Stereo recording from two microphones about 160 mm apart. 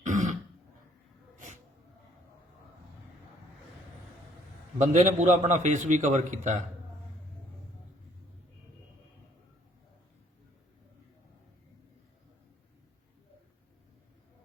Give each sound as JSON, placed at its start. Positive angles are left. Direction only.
{"t": 0.0, "sound": "throat clearing", "side_deg": -50}
{"t": 4.8, "sound": "a man's voice", "side_deg": -50}